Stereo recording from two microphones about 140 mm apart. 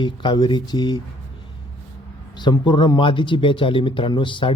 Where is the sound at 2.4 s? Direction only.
30° left (ahead or behind).